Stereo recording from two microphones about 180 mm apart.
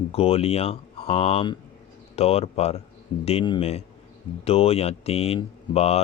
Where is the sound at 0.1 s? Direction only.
35° left (ahead or behind).